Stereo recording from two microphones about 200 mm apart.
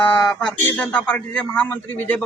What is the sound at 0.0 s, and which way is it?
A man's voice, 5° left (ahead or behind).